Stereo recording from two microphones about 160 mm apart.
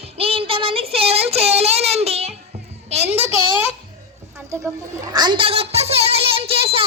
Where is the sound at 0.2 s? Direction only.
35° right (ahead or behind).